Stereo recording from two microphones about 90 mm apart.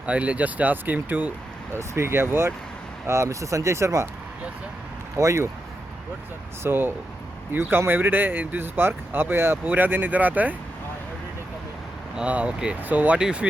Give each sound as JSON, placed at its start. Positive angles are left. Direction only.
{"t": 0.0, "sound": "speech", "side_deg": -15}
{"t": 5.1, "sound": "speech", "side_deg": -35}
{"t": 6.6, "sound": "speech", "side_deg": -25}
{"t": 12.1, "sound": "speech", "side_deg": -15}